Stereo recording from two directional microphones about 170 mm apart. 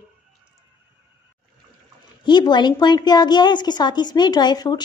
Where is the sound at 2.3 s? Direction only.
25° left (ahead or behind).